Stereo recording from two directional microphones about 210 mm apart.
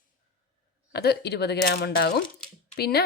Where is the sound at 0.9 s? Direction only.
50° left (ahead or behind).